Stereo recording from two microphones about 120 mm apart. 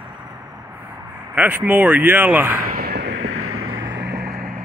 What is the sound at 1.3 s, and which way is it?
Speech, 15° right (ahead or behind).